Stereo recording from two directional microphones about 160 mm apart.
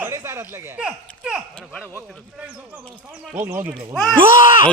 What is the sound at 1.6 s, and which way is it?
Speech, 10° left (ahead or behind).